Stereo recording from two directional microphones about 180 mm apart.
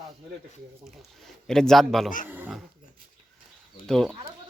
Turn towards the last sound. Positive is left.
turn(degrees=5)  # may be behind; listen again after turning